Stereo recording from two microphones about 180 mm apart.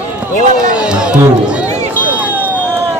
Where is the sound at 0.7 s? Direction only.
5° right (ahead or behind).